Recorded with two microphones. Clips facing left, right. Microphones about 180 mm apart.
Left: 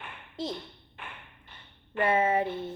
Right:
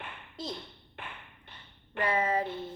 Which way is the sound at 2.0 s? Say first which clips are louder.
Left 4 dB; 25° left (ahead or behind).